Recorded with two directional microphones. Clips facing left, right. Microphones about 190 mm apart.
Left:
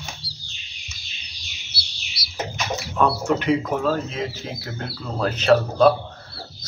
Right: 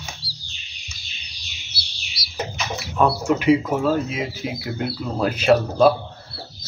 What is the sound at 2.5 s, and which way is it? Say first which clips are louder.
Speech: even; 5° right (ahead or behind).